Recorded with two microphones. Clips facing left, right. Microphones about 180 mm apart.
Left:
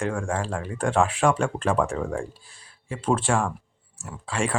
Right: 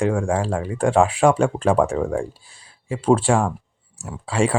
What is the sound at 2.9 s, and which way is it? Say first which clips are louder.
Speech: right 6 dB; 30° right (ahead or behind).